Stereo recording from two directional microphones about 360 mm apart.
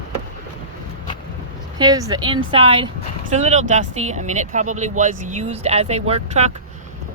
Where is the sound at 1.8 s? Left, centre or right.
Centre.